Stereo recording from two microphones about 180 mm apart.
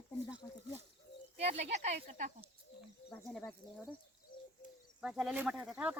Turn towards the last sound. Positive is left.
turn(degrees=-5)  # may be behind; listen again after turning